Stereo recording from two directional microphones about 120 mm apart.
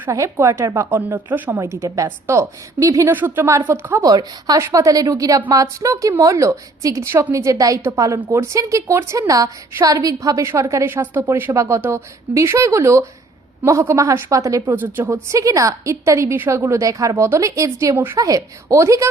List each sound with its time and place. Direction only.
0.0 s a woman's voice: 25° right (ahead or behind)
4.0 s a woman's voice: 35° right (ahead or behind)